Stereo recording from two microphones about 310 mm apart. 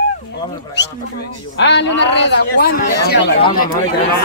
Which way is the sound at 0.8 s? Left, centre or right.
Left.